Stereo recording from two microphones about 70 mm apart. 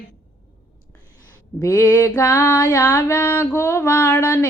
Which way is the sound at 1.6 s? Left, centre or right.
Left.